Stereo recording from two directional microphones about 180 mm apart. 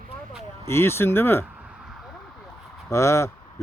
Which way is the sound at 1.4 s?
5° right (ahead or behind).